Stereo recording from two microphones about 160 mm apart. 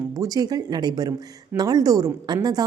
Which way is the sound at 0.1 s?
25° right (ahead or behind).